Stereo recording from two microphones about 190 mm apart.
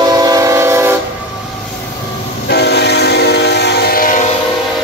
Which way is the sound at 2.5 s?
60° left (ahead or behind).